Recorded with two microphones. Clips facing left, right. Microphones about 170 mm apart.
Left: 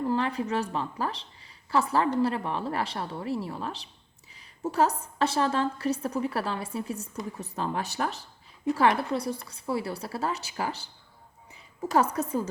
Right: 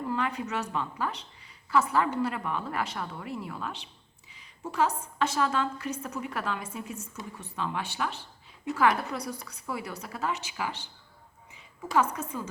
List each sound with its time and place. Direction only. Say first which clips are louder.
0.1 s a woman's voice: left 1 dB; 30° left (ahead or behind)